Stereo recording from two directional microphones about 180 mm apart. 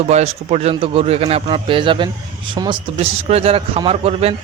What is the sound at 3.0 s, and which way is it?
A man's voice, 35° right (ahead or behind).